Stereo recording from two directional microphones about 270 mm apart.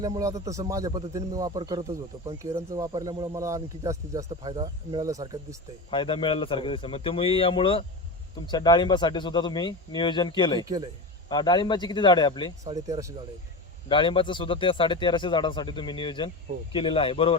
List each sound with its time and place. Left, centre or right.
0.0 s speech: centre
5.9 s a man's voice: centre
12.6 s speech: centre
13.8 s a man's voice: centre